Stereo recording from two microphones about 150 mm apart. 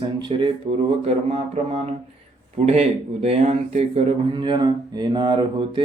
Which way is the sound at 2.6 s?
45° right (ahead or behind).